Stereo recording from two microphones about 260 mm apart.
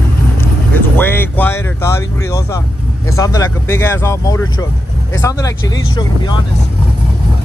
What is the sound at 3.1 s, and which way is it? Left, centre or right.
Speech, centre.